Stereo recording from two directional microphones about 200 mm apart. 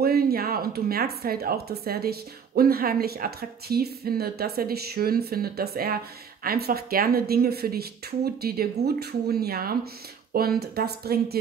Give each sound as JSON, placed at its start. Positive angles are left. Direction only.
{"t": 0.0, "sound": "speech", "side_deg": -50}